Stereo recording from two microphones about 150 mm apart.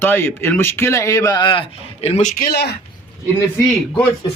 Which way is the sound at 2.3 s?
80° left.